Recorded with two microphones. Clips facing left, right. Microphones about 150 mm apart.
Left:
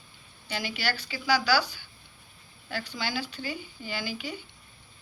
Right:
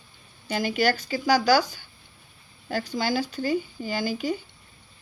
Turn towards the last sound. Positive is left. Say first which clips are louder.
# right 8 dB
turn(degrees=-45)  # may be behind; listen again after turning